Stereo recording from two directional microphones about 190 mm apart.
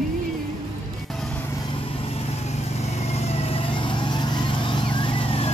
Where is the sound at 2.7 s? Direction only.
35° left (ahead or behind).